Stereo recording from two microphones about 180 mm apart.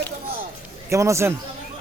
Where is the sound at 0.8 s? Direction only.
15° right (ahead or behind).